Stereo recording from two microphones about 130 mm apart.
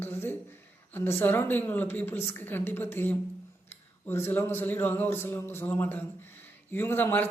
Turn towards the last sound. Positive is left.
turn(degrees=15)  # may be behind; listen again after turning